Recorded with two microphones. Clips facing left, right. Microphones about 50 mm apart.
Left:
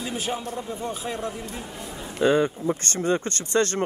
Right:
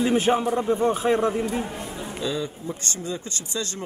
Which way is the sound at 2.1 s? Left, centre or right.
Left.